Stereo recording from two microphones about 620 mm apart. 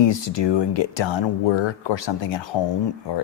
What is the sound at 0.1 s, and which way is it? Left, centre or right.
Speech, left.